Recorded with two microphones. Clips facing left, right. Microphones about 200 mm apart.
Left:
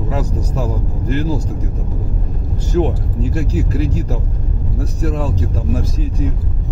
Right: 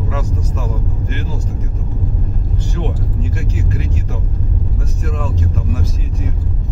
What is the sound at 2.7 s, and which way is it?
Vehicle, 40° left (ahead or behind).